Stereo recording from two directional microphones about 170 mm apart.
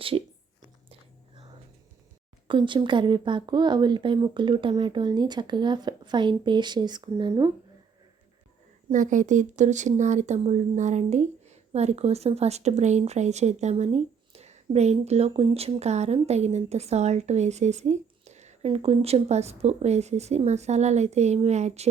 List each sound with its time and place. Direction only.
2.5 s speech: 30° right (ahead or behind)
8.9 s speech: 50° right (ahead or behind)